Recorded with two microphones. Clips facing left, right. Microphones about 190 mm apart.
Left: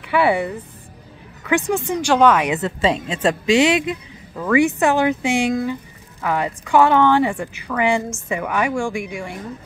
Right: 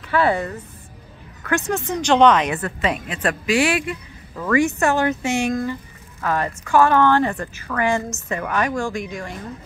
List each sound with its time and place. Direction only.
0.1 s a woman's voice: 15° left (ahead or behind)
4.4 s a woman's voice: 10° left (ahead or behind)